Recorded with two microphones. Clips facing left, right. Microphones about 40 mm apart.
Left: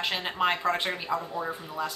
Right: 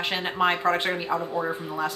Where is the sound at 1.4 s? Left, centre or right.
Right.